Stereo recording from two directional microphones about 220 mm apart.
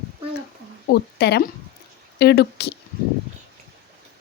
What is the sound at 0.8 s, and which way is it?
Speech, 50° left (ahead or behind).